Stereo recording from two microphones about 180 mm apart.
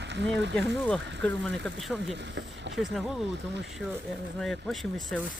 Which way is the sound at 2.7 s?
Centre (ahead or behind).